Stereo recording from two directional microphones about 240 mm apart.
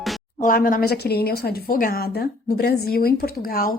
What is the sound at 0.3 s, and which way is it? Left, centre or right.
Speech, left.